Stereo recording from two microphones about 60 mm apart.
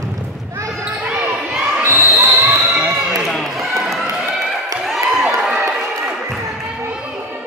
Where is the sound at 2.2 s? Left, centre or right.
Right.